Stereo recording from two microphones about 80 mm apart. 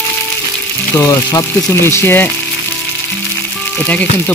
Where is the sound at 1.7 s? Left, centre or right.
Left.